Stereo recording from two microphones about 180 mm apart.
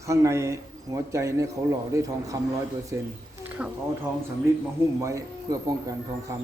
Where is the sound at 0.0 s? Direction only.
15° right (ahead or behind).